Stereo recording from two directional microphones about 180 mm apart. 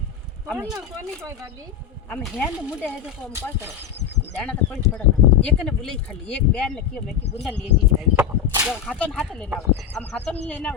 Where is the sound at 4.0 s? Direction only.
75° left (ahead or behind).